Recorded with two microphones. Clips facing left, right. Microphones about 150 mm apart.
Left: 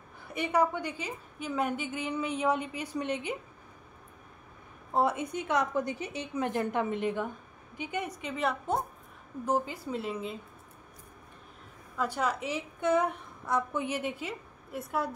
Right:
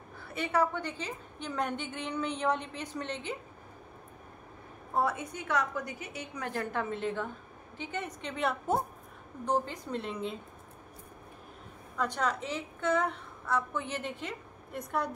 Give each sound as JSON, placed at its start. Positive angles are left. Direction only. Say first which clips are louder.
{"t": 0.3, "sound": "a woman's voice", "louder": "left 2 dB", "side_deg": 15}
{"t": 4.9, "sound": "a woman's voice", "louder": "left 3 dB", "side_deg": 20}
{"t": 12.0, "sound": "a woman's voice", "louder": "left 1 dB", "side_deg": 10}